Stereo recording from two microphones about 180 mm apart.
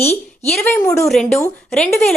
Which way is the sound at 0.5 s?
10° left (ahead or behind).